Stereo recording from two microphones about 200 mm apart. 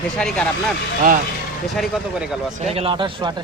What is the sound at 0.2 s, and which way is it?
Speech, 5° left (ahead or behind).